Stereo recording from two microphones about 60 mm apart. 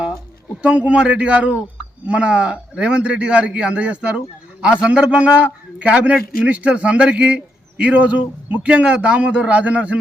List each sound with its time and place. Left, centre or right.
0.6 s a man's voice: centre